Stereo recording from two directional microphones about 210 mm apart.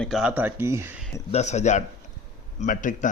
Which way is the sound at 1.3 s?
30° left (ahead or behind).